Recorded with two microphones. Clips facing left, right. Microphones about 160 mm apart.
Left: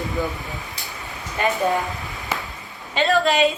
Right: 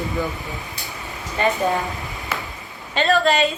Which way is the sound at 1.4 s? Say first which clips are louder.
Right 2 dB; 10° left (ahead or behind).